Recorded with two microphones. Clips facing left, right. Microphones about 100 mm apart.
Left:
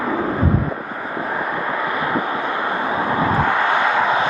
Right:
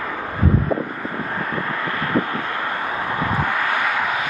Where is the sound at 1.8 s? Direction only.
20° left (ahead or behind).